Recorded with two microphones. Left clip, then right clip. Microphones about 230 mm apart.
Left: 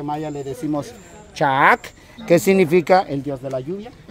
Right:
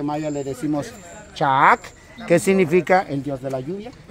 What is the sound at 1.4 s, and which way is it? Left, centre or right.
Speech, left.